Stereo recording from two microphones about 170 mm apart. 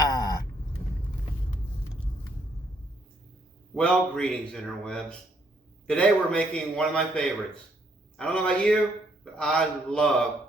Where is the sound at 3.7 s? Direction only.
5° left (ahead or behind).